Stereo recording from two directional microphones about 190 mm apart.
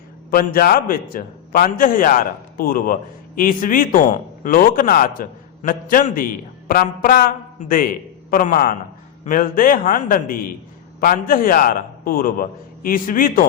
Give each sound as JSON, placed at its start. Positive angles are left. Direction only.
{"t": 0.3, "sound": "a man's voice", "side_deg": 50}